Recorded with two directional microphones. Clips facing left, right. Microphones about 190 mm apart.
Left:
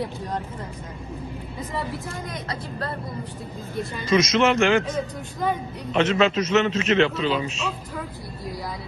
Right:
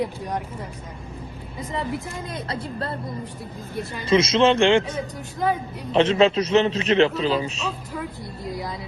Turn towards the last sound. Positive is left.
turn(degrees=-35)  # may be behind; listen again after turning